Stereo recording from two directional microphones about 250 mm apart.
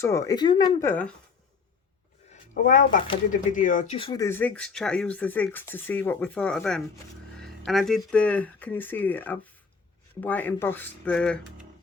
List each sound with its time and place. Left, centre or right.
0.0 s speech: centre
2.3 s speech: left; by 11.6 s centre